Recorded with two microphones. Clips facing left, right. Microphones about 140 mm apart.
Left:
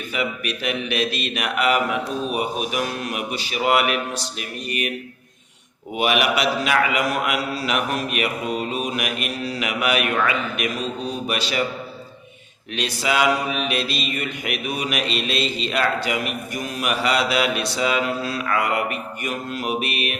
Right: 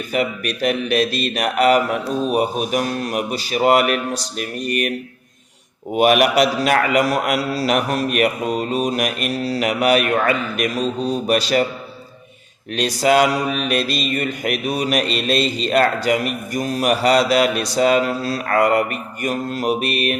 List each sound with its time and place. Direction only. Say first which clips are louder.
0.1 s mantra: right 5 dB; 40° right (ahead or behind)
5.9 s mantra: right 6 dB; 45° right (ahead or behind)
12.7 s mantra: right 7 dB; 40° right (ahead or behind)